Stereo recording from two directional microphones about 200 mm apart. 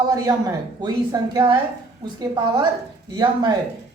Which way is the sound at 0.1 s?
15° right (ahead or behind).